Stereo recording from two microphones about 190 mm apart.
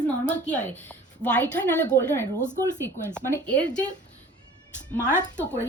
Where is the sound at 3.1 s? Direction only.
10° left (ahead or behind).